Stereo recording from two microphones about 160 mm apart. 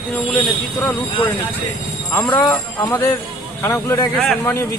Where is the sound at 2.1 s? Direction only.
10° left (ahead or behind).